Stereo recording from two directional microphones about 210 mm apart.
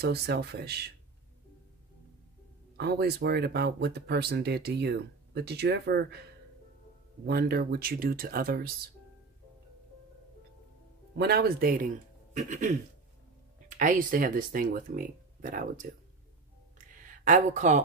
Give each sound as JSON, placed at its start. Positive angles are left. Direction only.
{"t": 0.0, "sound": "speech", "side_deg": -50}
{"t": 2.8, "sound": "speech", "side_deg": -50}
{"t": 7.2, "sound": "speech", "side_deg": -45}
{"t": 11.1, "sound": "speech", "side_deg": -50}
{"t": 16.7, "sound": "a sound", "side_deg": -40}